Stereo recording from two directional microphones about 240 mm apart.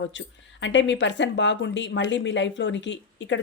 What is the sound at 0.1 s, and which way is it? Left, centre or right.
Speech, left.